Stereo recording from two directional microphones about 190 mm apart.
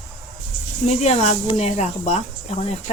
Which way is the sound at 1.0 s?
35° left (ahead or behind).